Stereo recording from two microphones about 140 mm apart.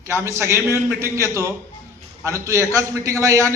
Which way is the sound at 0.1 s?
20° right (ahead or behind).